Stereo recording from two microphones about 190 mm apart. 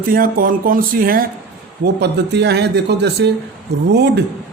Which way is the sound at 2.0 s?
65° right (ahead or behind).